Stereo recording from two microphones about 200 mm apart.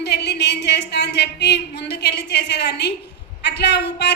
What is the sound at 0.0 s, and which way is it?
A woman's voice, 55° left (ahead or behind).